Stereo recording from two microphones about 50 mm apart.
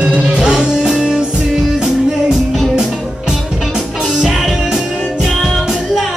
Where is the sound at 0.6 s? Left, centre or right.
Centre.